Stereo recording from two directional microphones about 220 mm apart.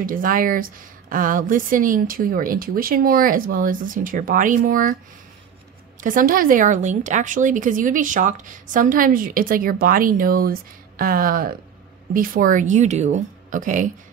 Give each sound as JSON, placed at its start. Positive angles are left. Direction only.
{"t": 0.0, "sound": "a woman's voice", "side_deg": -40}
{"t": 5.9, "sound": "a woman's voice", "side_deg": -35}